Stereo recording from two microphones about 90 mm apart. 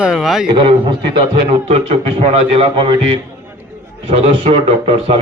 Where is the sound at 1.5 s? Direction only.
90° right.